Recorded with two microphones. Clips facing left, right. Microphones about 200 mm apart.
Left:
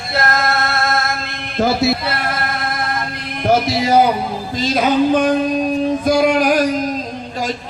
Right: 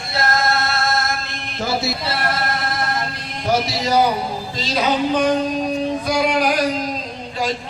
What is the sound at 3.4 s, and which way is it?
Music, 55° left (ahead or behind).